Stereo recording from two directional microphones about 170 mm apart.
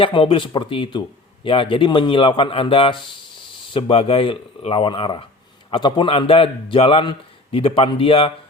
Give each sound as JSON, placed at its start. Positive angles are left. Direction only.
{"t": 0.0, "sound": "a man's voice", "side_deg": 30}